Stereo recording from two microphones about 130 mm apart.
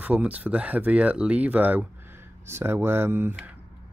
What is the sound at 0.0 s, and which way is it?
Speech, 10° right (ahead or behind).